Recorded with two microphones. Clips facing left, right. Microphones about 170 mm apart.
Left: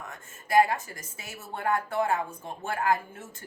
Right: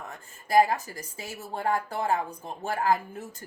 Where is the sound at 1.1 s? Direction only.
35° right (ahead or behind).